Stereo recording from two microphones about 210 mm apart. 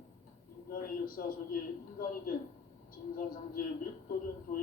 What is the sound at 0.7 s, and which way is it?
A man's voice, 45° left (ahead or behind).